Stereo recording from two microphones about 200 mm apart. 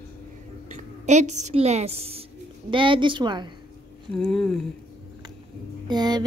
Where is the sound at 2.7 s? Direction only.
25° right (ahead or behind).